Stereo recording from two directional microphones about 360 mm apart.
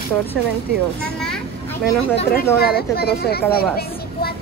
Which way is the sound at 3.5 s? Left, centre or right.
Left.